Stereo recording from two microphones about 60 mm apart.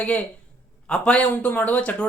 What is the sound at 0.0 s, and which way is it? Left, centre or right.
A man's voice, left.